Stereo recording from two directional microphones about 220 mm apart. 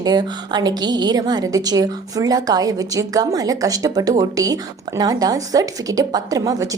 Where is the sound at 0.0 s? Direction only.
20° right (ahead or behind).